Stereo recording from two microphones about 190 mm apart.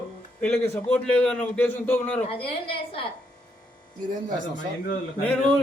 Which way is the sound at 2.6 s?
30° left (ahead or behind).